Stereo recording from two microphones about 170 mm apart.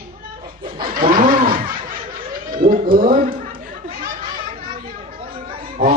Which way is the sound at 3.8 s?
60° right (ahead or behind).